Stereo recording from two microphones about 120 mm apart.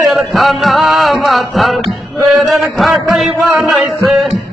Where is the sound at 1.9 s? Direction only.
Centre (ahead or behind).